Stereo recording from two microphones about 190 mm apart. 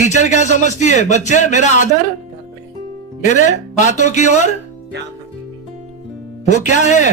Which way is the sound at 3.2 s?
40° left (ahead or behind).